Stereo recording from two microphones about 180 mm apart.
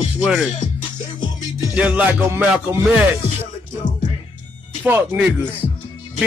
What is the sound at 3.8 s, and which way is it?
Music, 25° left (ahead or behind).